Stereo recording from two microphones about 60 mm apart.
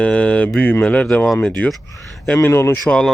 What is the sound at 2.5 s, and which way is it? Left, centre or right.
Speech, left.